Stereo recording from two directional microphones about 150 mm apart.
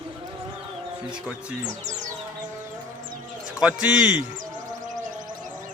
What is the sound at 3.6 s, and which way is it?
Speech, 5° right (ahead or behind).